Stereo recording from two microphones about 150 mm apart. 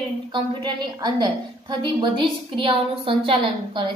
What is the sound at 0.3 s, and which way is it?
A woman's voice, 30° right (ahead or behind).